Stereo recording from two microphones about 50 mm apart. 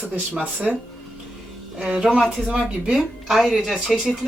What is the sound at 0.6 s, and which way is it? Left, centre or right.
Speech, centre.